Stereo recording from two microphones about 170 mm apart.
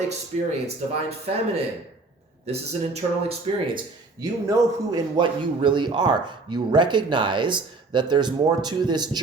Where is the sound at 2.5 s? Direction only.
35° right (ahead or behind).